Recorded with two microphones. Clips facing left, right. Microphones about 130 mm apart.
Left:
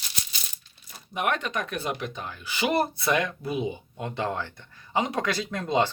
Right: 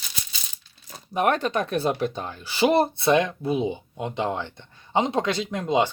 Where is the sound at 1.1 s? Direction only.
35° right (ahead or behind).